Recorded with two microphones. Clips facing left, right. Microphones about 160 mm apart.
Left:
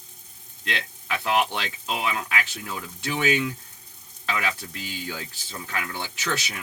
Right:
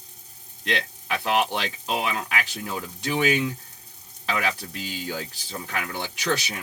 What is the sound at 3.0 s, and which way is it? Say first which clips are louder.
Speech: right 1 dB; 15° right (ahead or behind).